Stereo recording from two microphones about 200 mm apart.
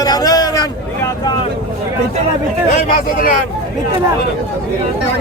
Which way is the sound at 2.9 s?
45° left (ahead or behind).